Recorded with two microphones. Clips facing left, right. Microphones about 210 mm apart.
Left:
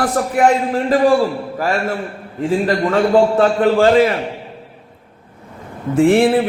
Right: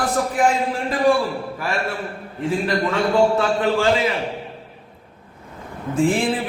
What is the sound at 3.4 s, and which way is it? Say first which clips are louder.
Speech: left 6 dB; 45° left (ahead or behind).